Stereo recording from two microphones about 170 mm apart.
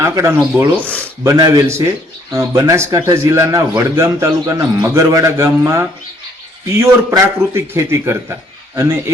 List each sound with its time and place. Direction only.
0.0 s a man's voice: 15° right (ahead or behind)
0.8 s speech: 10° left (ahead or behind)
1.2 s a man's voice: 20° right (ahead or behind)